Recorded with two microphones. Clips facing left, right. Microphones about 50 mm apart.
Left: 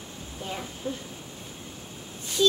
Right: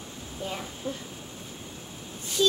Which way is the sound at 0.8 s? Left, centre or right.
Left.